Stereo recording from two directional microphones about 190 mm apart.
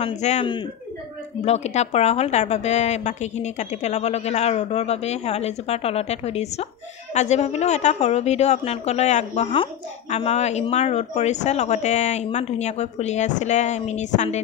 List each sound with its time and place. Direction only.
0.0 s a woman's voice: 35° left (ahead or behind)